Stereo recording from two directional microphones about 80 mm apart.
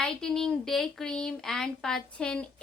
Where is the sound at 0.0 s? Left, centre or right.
Centre.